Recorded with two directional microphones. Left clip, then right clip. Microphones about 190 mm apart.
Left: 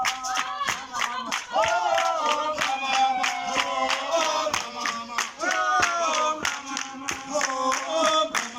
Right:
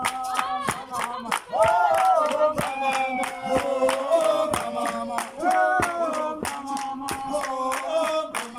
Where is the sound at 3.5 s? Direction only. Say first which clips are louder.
Right 7 dB; 75° right (ahead or behind).